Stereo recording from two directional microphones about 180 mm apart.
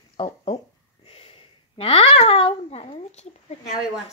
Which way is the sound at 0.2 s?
30° left (ahead or behind).